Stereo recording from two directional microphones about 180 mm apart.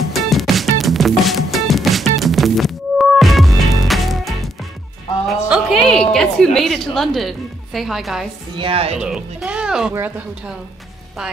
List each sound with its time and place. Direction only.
0.1 s music: centre (ahead or behind)
5.5 s music: centre (ahead or behind)
6.1 s a woman's voice: centre (ahead or behind)
8.5 s speech: 30° right (ahead or behind)
9.0 s a woman's voice: 5° right (ahead or behind)